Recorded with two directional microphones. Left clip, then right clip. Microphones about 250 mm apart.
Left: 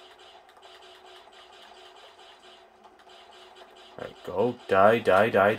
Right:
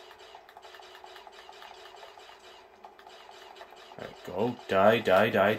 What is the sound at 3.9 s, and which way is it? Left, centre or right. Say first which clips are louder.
Speech: left 5 dB; centre.